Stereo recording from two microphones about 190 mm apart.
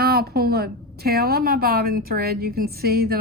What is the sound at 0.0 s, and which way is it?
A woman's voice, 55° right (ahead or behind).